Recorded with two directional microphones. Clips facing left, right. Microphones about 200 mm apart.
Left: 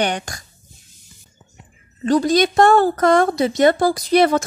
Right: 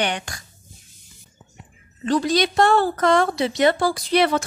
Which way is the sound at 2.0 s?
45° left (ahead or behind).